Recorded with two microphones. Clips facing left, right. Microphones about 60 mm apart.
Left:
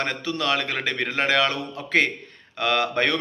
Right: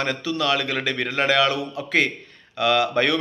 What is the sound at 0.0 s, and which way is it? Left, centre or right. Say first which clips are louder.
A man's voice: right 2 dB; left.